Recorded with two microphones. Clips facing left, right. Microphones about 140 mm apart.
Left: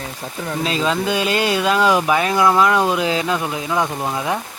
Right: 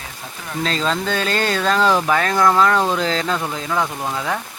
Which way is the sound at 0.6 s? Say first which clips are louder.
Left 1 dB; 10° left (ahead or behind).